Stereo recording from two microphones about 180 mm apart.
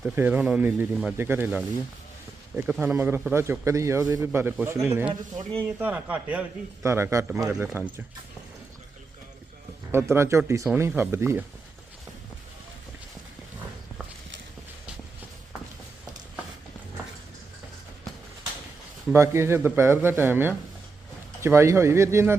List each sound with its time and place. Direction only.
0.0 s a man's voice: 10° right (ahead or behind)
2.6 s a man's voice: 5° right (ahead or behind)
5.4 s speech: 30° right (ahead or behind)
5.6 s a man's voice: 10° right (ahead or behind)
9.9 s a man's voice: 15° right (ahead or behind)
19.1 s a man's voice: 15° right (ahead or behind)